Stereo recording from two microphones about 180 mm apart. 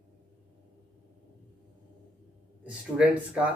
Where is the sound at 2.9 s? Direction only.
5° right (ahead or behind).